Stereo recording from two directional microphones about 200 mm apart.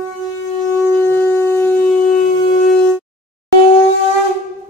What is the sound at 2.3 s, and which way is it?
Shofar, 40° left (ahead or behind).